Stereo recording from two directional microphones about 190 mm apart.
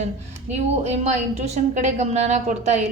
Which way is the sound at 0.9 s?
35° right (ahead or behind).